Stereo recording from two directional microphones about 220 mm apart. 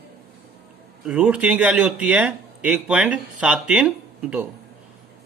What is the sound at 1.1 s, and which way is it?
Speech, 5° right (ahead or behind).